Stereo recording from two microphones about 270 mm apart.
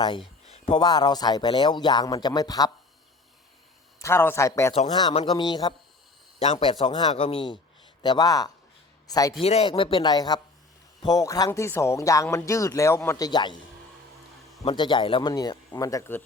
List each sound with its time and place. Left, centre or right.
0.4 s speech: left
4.0 s speech: centre
14.6 s speech: centre